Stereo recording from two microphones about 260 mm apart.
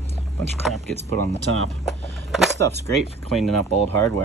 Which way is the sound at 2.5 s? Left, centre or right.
Centre.